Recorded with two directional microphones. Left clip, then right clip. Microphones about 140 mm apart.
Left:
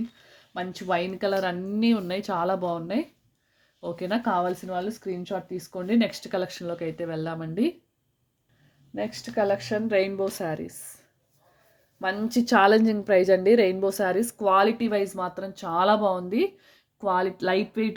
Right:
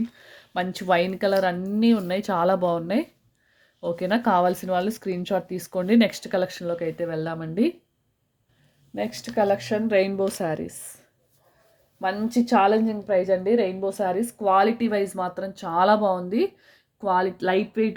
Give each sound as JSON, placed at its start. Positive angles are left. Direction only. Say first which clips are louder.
{"t": 0.3, "sound": "a sound", "louder": "right 7 dB", "side_deg": -30}
{"t": 0.9, "sound": "speech", "louder": "right 4 dB", "side_deg": -20}
{"t": 4.3, "sound": "speech", "louder": "right 6 dB", "side_deg": -35}
{"t": 9.0, "sound": "speech", "louder": "right 2 dB", "side_deg": -10}
{"t": 11.9, "sound": "a woman's voice", "louder": "right 2 dB", "side_deg": 5}
{"t": 12.5, "sound": "a woman's voice", "louder": "left 1 dB", "side_deg": 30}
{"t": 12.8, "sound": "a woman's voice", "louder": "left 2 dB", "side_deg": 60}